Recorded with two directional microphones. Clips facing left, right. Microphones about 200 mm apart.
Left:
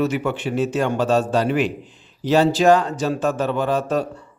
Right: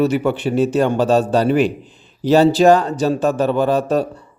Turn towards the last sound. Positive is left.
turn(degrees=-35)  # may be behind; listen again after turning